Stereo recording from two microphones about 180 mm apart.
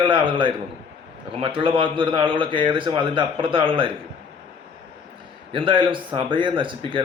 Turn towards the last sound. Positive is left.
turn(degrees=-30)  # may be behind; listen again after turning